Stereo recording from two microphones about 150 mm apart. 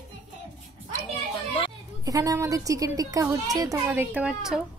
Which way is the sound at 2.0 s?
20° right (ahead or behind).